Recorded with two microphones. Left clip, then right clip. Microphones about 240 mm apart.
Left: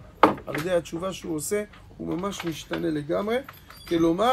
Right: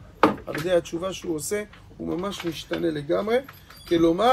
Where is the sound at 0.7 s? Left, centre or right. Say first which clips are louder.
Right 3 dB; centre.